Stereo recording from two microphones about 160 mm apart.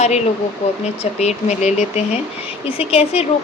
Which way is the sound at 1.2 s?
45° left (ahead or behind).